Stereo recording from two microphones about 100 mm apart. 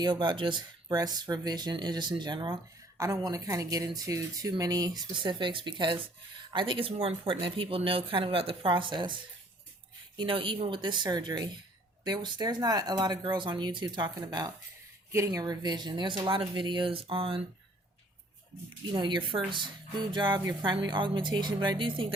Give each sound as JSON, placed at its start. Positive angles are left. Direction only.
{"t": 0.0, "sound": "speech", "side_deg": -50}
{"t": 3.0, "sound": "speech", "side_deg": -35}
{"t": 10.2, "sound": "speech", "side_deg": -60}
{"t": 15.1, "sound": "speech", "side_deg": -30}
{"t": 15.4, "sound": "speech", "side_deg": -45}
{"t": 18.9, "sound": "speech", "side_deg": -50}